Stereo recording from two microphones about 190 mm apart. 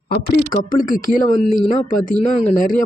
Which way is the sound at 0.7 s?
45° left (ahead or behind).